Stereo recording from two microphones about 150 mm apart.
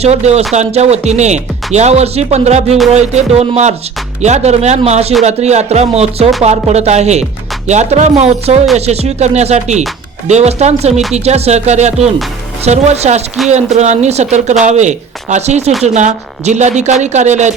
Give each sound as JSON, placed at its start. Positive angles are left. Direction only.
{"t": 0.0, "sound": "speech", "side_deg": -45}